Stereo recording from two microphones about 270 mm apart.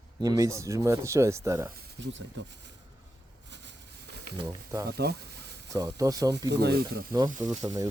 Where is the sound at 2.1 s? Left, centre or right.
Right.